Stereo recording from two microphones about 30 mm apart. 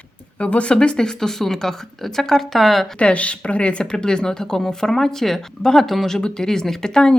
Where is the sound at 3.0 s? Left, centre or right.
Left.